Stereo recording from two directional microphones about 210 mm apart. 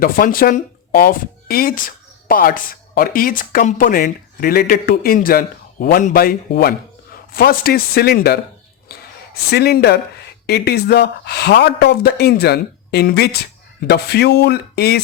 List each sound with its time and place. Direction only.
0.0 s speech: 45° left (ahead or behind)
8.9 s a sound: 50° left (ahead or behind)
10.4 s speech: 50° left (ahead or behind)